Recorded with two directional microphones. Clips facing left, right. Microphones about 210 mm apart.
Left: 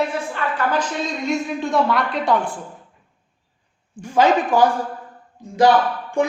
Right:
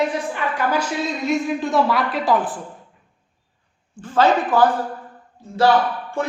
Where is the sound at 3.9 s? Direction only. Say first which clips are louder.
Left 1 dB; 10° left (ahead or behind).